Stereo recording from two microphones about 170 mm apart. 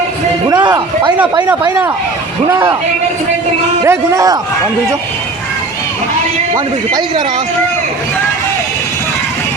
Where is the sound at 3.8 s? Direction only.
15° right (ahead or behind).